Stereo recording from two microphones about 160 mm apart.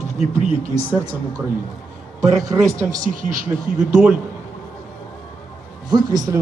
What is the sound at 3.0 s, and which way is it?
Speech, 55° right (ahead or behind).